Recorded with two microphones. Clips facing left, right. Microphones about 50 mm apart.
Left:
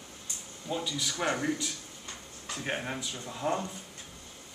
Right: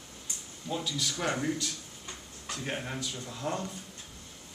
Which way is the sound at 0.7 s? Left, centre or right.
Centre.